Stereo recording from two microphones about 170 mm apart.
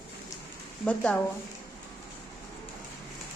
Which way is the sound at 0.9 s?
10° left (ahead or behind).